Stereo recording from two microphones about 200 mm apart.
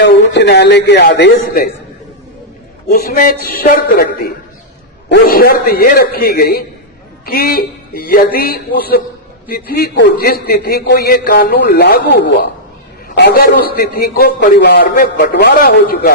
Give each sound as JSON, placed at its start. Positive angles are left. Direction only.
{"t": 0.0, "sound": "a man's voice", "side_deg": 55}
{"t": 3.0, "sound": "a man's voice", "side_deg": 45}